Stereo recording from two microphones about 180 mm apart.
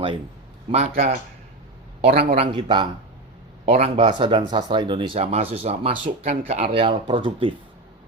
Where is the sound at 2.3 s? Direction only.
30° right (ahead or behind).